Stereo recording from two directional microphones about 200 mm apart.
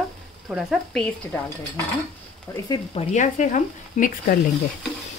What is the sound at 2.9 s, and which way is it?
Speech, 35° left (ahead or behind).